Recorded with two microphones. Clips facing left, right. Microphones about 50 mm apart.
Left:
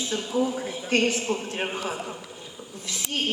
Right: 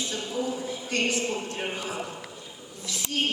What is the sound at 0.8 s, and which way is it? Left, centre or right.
A woman's voice, left.